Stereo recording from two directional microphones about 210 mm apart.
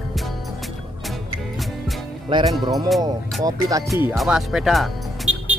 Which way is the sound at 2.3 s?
25° right (ahead or behind).